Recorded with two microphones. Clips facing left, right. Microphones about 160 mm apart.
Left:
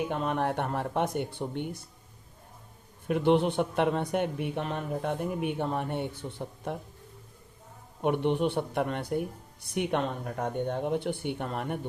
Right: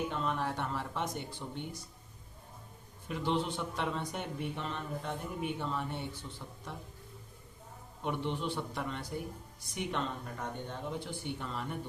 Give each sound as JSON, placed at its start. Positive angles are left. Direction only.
{"t": 0.1, "sound": "speech", "side_deg": 55}
{"t": 3.1, "sound": "speech", "side_deg": 60}
{"t": 8.0, "sound": "speech", "side_deg": 60}